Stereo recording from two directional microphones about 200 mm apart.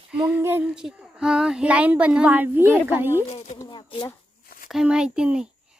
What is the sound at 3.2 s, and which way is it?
Speech, 30° left (ahead or behind).